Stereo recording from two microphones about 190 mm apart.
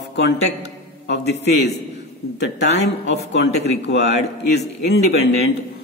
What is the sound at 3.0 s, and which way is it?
Speech, 65° left (ahead or behind).